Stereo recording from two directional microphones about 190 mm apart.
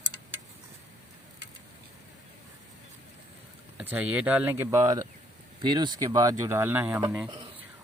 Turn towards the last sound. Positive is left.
turn(degrees=-10)  # may be behind; listen again after turning